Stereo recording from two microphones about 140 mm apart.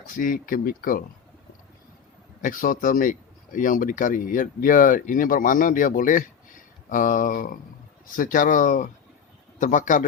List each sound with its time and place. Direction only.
0.1 s speech: 85° left
2.4 s speech: 80° left